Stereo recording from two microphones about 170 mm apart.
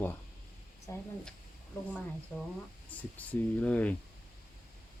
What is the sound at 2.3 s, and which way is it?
Speech, 10° left (ahead or behind).